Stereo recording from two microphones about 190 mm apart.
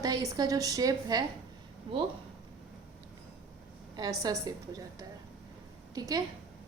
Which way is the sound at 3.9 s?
20° right (ahead or behind).